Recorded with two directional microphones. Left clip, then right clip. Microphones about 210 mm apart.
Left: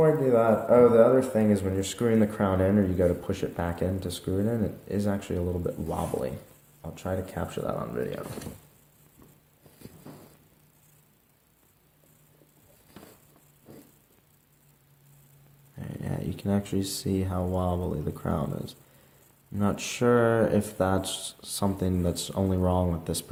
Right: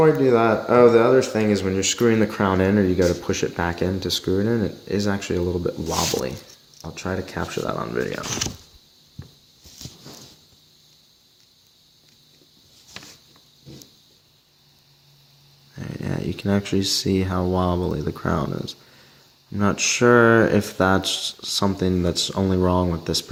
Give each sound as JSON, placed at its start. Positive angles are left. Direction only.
{"t": 0.0, "sound": "a man's voice", "side_deg": -45}
{"t": 15.8, "sound": "a man's voice", "side_deg": -35}